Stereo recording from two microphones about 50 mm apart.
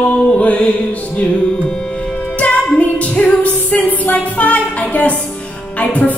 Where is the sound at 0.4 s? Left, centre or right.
Left.